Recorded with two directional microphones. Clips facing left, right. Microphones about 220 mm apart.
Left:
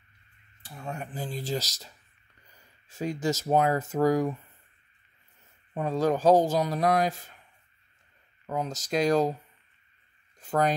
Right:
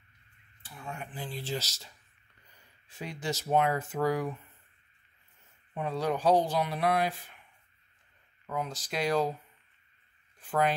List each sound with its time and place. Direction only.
0.6 s speech: 40° left (ahead or behind)
2.9 s speech: 45° left (ahead or behind)
5.8 s speech: 40° left (ahead or behind)
8.5 s speech: 40° left (ahead or behind)
10.4 s speech: 40° left (ahead or behind)